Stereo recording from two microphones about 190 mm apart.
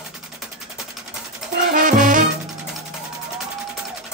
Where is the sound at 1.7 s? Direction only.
45° right (ahead or behind).